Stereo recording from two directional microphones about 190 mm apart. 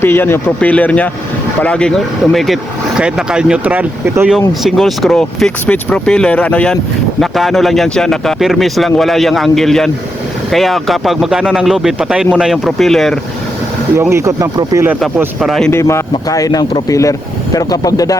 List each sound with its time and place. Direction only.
0.0 s speech: 10° left (ahead or behind); by 4.4 s 10° right (ahead or behind)
4.4 s speech: centre (ahead or behind)
13.9 s speech: 15° right (ahead or behind)
15.2 s speech: centre (ahead or behind)
15.7 s speech: 15° left (ahead or behind)